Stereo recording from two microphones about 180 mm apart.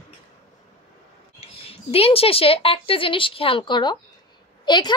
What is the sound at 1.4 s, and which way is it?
A woman's voice, 35° left (ahead or behind).